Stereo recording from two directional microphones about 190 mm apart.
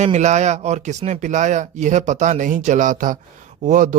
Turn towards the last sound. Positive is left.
turn(degrees=-40)  # may be behind; listen again after turning